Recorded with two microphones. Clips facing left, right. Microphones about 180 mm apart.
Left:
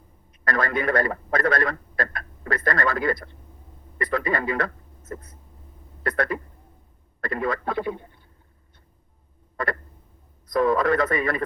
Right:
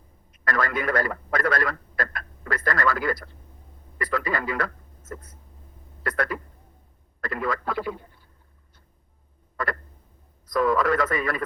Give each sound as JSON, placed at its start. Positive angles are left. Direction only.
{"t": 0.4, "sound": "a man's voice", "side_deg": 25}
{"t": 10.5, "sound": "a man's voice", "side_deg": 25}